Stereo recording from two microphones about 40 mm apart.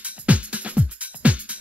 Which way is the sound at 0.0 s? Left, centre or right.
Right.